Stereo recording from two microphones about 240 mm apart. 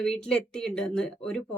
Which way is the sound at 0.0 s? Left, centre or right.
Centre.